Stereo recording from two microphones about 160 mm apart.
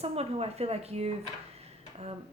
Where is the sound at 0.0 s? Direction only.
40° right (ahead or behind).